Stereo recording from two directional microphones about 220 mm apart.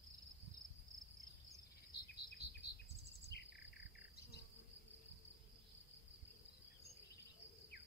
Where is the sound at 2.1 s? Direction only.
45° left (ahead or behind).